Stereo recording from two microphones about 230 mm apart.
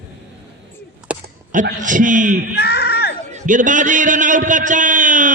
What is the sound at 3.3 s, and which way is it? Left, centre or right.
A man's voice, right.